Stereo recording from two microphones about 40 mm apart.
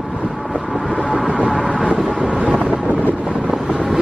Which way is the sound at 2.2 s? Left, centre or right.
Right.